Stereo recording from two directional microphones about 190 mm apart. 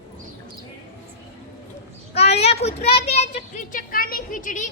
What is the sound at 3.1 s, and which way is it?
A child's voice, 35° left (ahead or behind).